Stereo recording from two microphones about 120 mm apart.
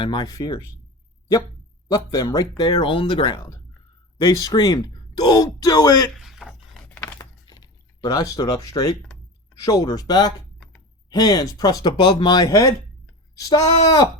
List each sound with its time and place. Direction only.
0.0 s speech: 40° left (ahead or behind)
1.9 s speech: 30° left (ahead or behind)
4.2 s speech: 30° left (ahead or behind)
6.1 s a sound: centre (ahead or behind)
6.9 s a sound: 15° left (ahead or behind)
8.0 s speech: 30° left (ahead or behind)